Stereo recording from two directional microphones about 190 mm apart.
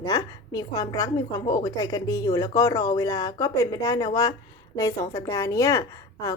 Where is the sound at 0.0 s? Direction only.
20° left (ahead or behind).